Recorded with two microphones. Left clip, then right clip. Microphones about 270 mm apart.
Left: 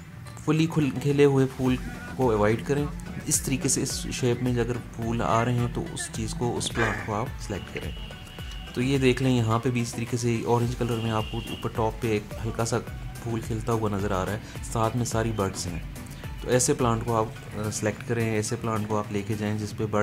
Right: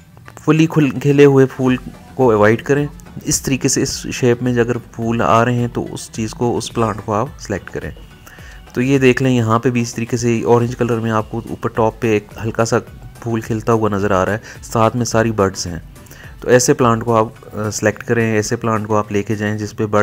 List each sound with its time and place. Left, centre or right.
0.5 s speech: centre